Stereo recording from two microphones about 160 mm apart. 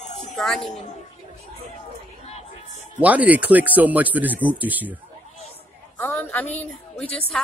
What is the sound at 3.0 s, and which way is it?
Speech, 10° right (ahead or behind).